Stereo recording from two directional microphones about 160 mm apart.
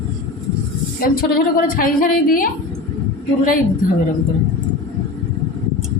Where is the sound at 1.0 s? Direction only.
65° left (ahead or behind).